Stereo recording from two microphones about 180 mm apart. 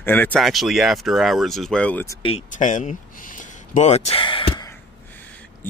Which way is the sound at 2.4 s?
45° left (ahead or behind).